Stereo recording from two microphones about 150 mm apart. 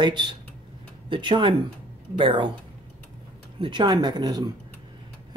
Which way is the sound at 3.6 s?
30° right (ahead or behind).